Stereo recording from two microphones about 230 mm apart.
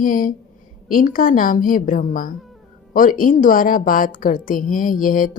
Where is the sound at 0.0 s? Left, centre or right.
Left.